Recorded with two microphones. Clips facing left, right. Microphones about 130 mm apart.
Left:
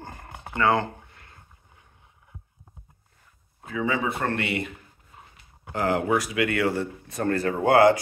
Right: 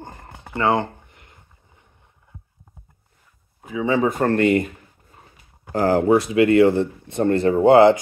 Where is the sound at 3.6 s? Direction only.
15° right (ahead or behind).